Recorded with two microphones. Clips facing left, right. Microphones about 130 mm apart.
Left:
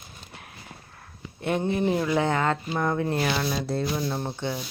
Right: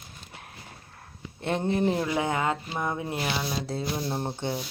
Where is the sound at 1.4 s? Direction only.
30° right (ahead or behind).